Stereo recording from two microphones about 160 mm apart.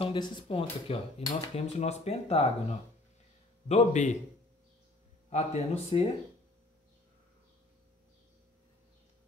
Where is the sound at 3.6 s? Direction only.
45° left (ahead or behind).